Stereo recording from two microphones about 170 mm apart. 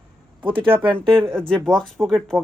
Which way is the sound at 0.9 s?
30° right (ahead or behind).